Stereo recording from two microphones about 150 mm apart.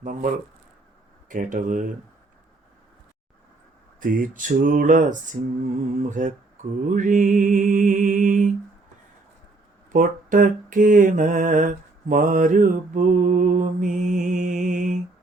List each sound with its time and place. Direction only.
0.0 s mantra: 60° right (ahead or behind)
4.0 s mantra: 60° right (ahead or behind)
9.9 s mantra: 65° right (ahead or behind)